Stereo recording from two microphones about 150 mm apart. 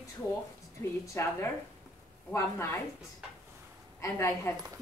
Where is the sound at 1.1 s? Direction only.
20° left (ahead or behind).